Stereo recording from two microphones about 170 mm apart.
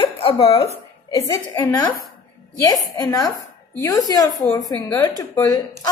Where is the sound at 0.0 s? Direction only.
35° left (ahead or behind).